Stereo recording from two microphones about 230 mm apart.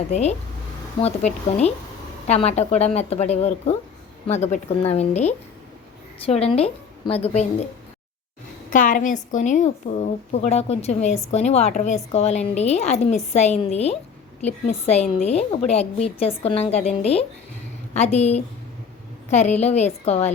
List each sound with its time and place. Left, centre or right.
0.1 s a woman's voice: left
8.7 s a woman's voice: left